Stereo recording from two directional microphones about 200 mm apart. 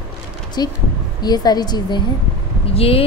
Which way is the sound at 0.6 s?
20° left (ahead or behind).